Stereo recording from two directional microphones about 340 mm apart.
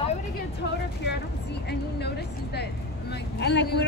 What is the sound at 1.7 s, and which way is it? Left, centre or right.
A woman's voice, left.